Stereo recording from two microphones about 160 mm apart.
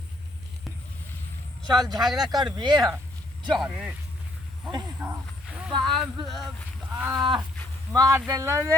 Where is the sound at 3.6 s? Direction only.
10° right (ahead or behind).